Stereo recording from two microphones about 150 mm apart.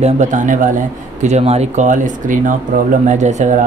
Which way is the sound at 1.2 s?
45° right (ahead or behind).